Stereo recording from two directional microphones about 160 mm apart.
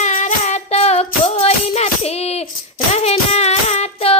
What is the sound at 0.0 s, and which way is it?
Music, 50° left (ahead or behind).